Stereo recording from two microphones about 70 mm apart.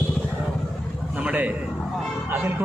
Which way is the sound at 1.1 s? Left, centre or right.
Centre.